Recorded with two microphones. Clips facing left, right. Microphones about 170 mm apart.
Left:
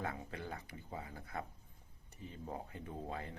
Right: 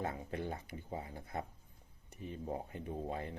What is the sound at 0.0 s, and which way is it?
Speech, 25° right (ahead or behind).